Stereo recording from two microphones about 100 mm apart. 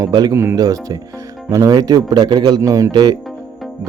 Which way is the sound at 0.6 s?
35° right (ahead or behind).